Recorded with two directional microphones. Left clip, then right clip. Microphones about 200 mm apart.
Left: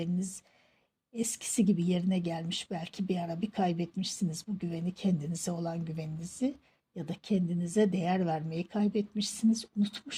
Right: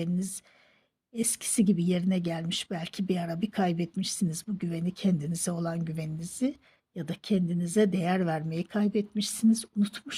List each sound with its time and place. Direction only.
0.0 s speech: 20° right (ahead or behind)